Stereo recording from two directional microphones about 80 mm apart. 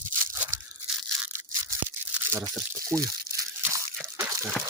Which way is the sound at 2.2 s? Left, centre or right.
Right.